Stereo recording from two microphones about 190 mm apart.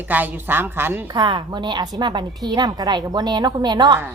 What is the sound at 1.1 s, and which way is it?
A woman's voice, 25° right (ahead or behind).